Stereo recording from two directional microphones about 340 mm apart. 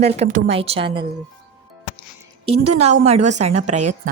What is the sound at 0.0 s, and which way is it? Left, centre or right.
A woman's voice, centre.